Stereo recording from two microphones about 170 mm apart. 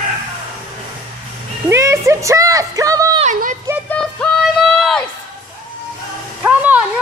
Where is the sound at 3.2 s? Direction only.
50° right (ahead or behind).